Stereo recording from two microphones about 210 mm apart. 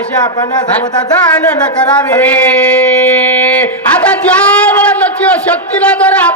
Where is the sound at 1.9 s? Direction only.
5° left (ahead or behind).